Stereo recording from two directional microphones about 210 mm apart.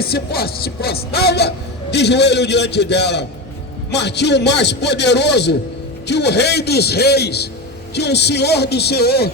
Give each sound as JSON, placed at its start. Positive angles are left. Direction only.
{"t": 0.0, "sound": "a man's voice", "side_deg": 50}